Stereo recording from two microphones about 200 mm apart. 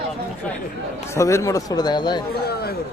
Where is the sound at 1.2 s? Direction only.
15° left (ahead or behind).